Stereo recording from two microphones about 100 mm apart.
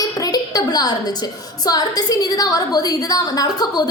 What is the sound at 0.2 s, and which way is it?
A woman's voice, 40° left (ahead or behind).